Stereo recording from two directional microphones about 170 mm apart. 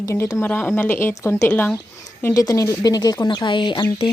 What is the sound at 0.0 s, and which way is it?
A woman's voice, 20° left (ahead or behind).